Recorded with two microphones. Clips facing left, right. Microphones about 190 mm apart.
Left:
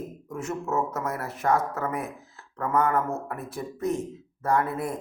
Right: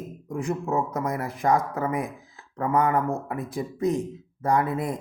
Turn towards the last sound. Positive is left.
turn(degrees=-15)  # may be behind; listen again after turning